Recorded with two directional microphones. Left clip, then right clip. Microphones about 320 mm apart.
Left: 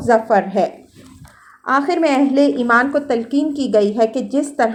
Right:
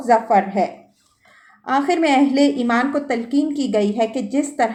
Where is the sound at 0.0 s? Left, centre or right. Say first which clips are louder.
Left 1 dB; left.